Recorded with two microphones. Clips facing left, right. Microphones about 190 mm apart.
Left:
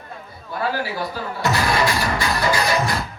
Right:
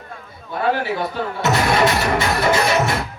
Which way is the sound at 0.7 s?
60° right (ahead or behind).